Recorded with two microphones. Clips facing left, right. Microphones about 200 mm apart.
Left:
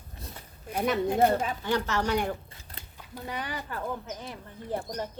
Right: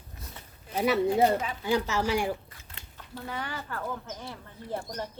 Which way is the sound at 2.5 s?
40° left (ahead or behind).